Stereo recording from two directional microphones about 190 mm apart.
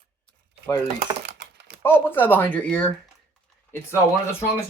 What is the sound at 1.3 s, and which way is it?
Typing, 65° right (ahead or behind).